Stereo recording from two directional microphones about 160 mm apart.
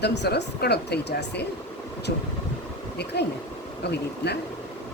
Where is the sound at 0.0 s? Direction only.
90° left.